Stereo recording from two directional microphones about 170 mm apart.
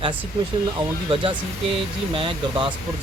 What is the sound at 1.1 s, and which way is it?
Speech, 30° right (ahead or behind).